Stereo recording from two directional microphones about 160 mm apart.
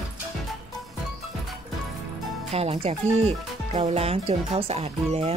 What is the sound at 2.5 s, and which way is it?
Speech, 40° right (ahead or behind).